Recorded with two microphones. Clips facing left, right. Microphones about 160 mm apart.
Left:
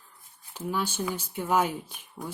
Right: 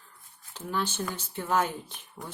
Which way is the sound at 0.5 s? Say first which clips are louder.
Left 1 dB; 10° left (ahead or behind).